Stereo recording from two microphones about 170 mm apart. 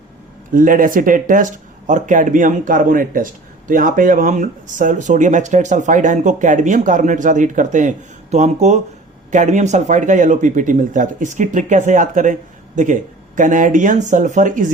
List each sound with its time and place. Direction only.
0.5 s speech: 55° right (ahead or behind)